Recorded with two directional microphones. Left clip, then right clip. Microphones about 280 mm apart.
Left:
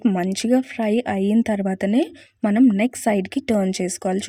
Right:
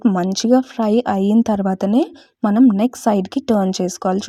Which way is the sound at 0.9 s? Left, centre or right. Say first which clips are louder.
Right 5 dB; centre.